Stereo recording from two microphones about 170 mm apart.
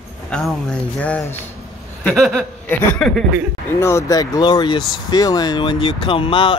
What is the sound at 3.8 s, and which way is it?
Speech, 20° left (ahead or behind).